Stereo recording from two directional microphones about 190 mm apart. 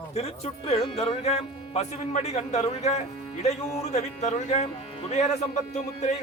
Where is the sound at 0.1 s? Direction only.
35° left (ahead or behind).